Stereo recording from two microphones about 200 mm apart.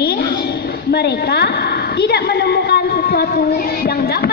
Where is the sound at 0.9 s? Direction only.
55° left (ahead or behind).